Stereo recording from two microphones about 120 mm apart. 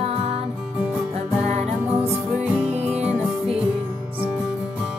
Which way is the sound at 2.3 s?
10° right (ahead or behind).